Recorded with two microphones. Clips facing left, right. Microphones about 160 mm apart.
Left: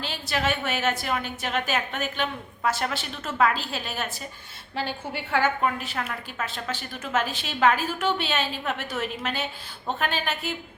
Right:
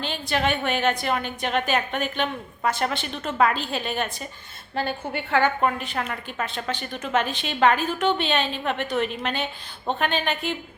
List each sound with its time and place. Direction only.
0.0 s a woman's voice: 5° left (ahead or behind)
4.7 s a woman's voice: 55° right (ahead or behind)
5.6 s a woman's voice: centre (ahead or behind)